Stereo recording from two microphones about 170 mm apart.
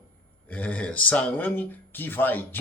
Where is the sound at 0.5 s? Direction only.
10° left (ahead or behind).